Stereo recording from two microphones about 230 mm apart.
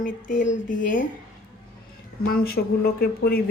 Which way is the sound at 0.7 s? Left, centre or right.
Left.